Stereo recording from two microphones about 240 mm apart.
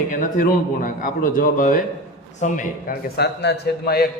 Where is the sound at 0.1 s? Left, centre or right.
Left.